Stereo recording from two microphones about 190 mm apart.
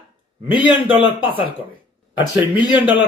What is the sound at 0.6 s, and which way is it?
Speech, 5° right (ahead or behind).